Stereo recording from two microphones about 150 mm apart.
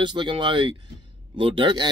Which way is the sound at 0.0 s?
30° right (ahead or behind).